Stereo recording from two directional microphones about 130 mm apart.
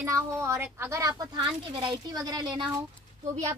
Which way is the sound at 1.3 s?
40° right (ahead or behind).